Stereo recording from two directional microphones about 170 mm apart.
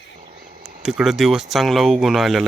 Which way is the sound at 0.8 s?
5° right (ahead or behind).